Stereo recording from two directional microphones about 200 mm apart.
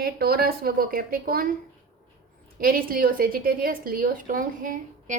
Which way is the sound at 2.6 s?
45° right (ahead or behind).